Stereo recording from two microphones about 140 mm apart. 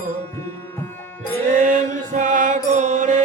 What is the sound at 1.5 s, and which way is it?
Mantra, 70° right (ahead or behind).